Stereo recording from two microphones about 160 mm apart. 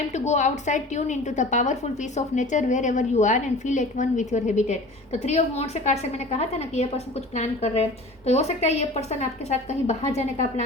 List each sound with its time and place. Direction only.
0.1 s a woman's voice: 45° left (ahead or behind)